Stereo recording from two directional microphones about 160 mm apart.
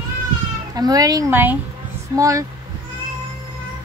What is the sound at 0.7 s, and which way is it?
Speech, 25° right (ahead or behind).